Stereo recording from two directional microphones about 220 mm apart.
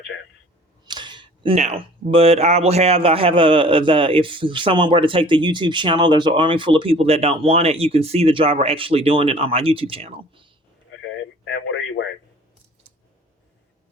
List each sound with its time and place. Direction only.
0.9 s speech: 20° right (ahead or behind)
11.4 s radio: 55° left (ahead or behind)